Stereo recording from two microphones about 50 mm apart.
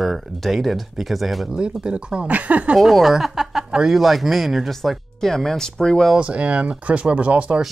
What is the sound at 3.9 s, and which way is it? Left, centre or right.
Speech, centre.